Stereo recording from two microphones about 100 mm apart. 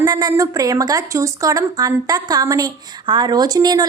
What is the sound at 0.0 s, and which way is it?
A woman's voice, 35° right (ahead or behind).